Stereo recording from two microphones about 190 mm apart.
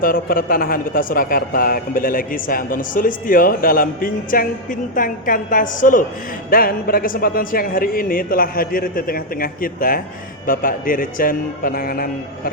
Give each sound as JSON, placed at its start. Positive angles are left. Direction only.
{"t": 0.0, "sound": "speech", "side_deg": 50}